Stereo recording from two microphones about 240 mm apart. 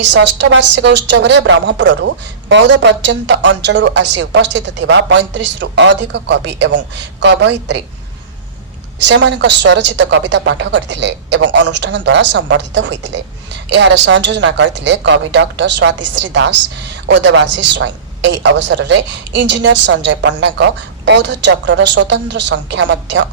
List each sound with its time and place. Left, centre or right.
0.1 s a woman's voice: right
9.0 s a woman's voice: right